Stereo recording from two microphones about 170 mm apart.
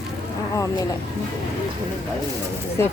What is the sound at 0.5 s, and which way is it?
Speech, 20° left (ahead or behind).